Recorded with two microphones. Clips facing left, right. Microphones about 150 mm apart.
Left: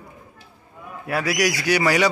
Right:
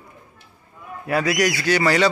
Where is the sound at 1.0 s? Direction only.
5° left (ahead or behind).